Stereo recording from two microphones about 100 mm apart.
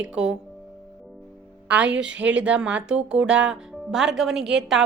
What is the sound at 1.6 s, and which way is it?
Speech, 10° right (ahead or behind).